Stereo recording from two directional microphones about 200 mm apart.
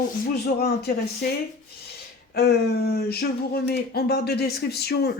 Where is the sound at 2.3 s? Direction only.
55° left (ahead or behind).